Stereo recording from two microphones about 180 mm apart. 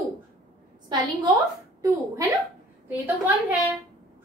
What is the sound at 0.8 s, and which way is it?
A woman's voice, 25° right (ahead or behind).